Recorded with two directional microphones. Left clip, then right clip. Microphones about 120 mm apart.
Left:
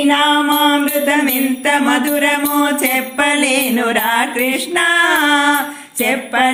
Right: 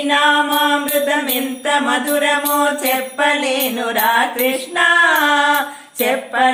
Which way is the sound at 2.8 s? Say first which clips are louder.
Left 1 dB; 30° left (ahead or behind).